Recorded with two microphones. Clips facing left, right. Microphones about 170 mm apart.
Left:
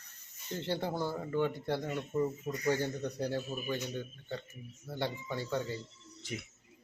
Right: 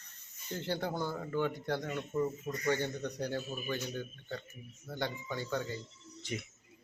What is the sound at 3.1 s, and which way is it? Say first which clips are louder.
Speech: left 2 dB; 30° left (ahead or behind).